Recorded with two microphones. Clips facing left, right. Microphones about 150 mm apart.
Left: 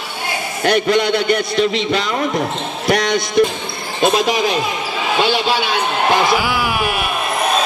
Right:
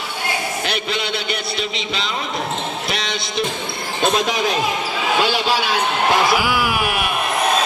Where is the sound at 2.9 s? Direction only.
50° left (ahead or behind).